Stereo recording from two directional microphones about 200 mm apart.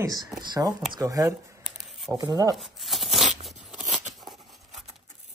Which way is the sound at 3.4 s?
5° right (ahead or behind).